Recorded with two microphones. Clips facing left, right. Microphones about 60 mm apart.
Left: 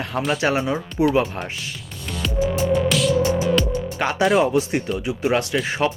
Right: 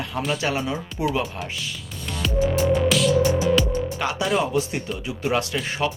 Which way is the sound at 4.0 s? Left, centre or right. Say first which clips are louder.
Left 7 dB; left.